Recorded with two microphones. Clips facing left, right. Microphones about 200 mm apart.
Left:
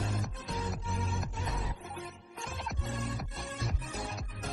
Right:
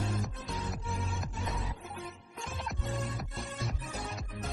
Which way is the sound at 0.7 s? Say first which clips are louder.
Left 1 dB; centre (ahead or behind).